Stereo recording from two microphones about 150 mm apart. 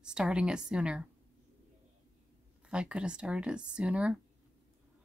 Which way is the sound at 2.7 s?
5° right (ahead or behind).